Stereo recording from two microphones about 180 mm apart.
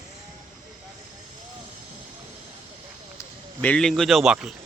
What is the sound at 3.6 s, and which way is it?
Speech, 5° left (ahead or behind).